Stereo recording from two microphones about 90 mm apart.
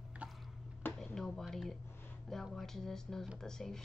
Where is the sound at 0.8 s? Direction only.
25° left (ahead or behind).